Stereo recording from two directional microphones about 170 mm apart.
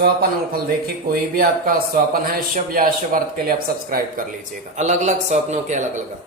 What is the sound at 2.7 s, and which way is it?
Speech, 55° right (ahead or behind).